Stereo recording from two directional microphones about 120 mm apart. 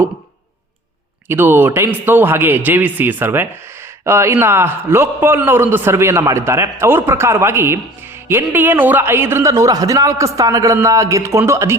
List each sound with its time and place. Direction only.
1.3 s a man's voice: 20° right (ahead or behind)